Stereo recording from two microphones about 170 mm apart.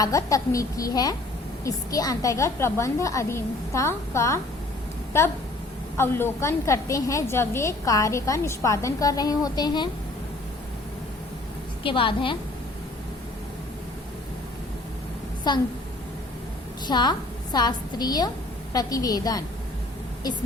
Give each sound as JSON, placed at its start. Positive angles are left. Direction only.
{"t": 0.0, "sound": "a woman's voice", "side_deg": 20}
{"t": 6.0, "sound": "a woman's voice", "side_deg": 15}
{"t": 11.8, "sound": "a woman's voice", "side_deg": 30}
{"t": 15.5, "sound": "a woman's voice", "side_deg": 25}
{"t": 16.8, "sound": "a woman's voice", "side_deg": 25}